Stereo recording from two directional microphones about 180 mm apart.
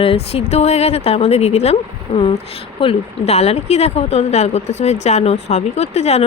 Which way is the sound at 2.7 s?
35° left (ahead or behind).